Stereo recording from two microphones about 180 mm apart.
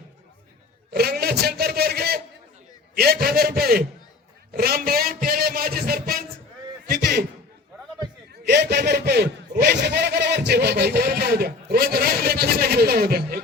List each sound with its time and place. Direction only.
0.9 s a man's voice: 60° right (ahead or behind)
8.4 s speech: 65° right (ahead or behind)